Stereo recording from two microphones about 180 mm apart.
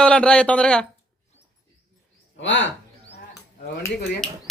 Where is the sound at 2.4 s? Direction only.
90° left.